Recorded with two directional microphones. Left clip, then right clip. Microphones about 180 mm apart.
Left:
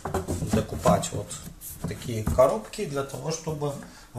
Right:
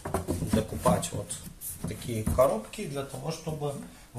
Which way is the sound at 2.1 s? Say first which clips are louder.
Left 3 dB; centre (ahead or behind).